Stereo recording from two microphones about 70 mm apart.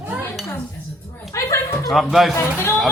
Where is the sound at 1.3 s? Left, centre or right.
Left.